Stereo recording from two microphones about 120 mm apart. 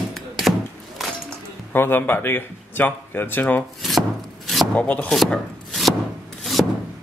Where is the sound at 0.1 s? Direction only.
Centre (ahead or behind).